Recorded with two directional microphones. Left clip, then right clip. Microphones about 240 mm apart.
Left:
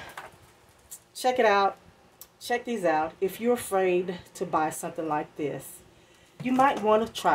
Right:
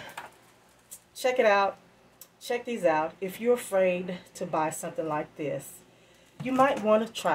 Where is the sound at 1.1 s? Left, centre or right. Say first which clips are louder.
Left 1 dB; left.